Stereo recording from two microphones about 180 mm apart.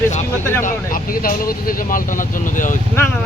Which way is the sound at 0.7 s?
50° left (ahead or behind).